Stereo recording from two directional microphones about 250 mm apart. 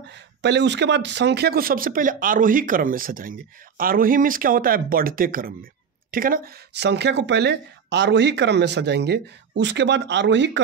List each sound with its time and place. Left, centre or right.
0.4 s a woman's voice: right